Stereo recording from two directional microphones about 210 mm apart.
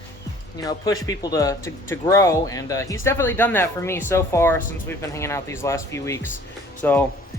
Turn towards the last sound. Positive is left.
turn(degrees=10)  # may be behind; listen again after turning